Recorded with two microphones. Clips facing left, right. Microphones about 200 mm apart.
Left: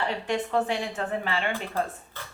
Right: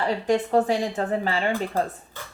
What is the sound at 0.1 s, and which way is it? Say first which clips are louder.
Speech: right 6 dB; 40° right (ahead or behind).